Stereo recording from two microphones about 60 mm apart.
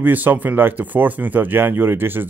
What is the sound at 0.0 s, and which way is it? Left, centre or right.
Speech, right.